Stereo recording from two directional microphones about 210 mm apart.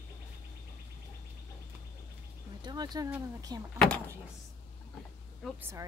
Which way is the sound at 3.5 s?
20° right (ahead or behind).